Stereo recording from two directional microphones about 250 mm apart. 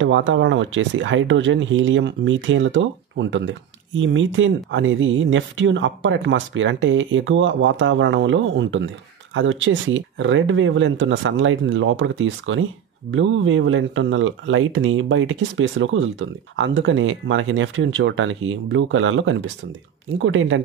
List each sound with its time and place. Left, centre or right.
0.0 s speech: right